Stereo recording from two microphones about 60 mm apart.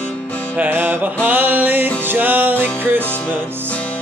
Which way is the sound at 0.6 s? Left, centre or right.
Right.